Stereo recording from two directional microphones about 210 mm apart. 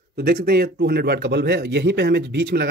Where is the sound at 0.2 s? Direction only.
50° right (ahead or behind).